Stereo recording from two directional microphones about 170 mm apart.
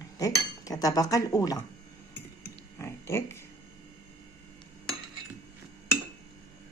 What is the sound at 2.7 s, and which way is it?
Pig, 15° left (ahead or behind).